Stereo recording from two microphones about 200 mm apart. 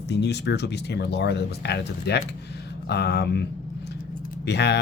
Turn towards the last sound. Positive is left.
turn(degrees=60)  # may be behind; listen again after turning